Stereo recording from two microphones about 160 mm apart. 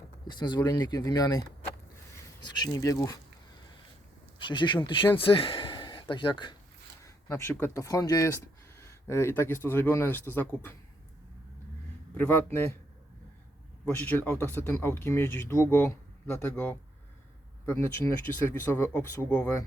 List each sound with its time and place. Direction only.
0.3 s speech: 30° left (ahead or behind)
4.4 s speech: 30° left (ahead or behind)
7.0 s speech: 15° left (ahead or behind)
12.1 s speech: 10° left (ahead or behind)
14.0 s speech: 10° left (ahead or behind)